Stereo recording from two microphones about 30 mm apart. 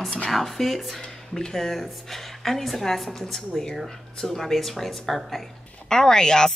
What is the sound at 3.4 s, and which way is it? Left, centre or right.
Speech, centre.